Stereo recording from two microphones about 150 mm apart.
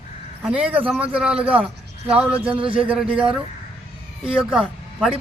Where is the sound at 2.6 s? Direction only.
35° right (ahead or behind).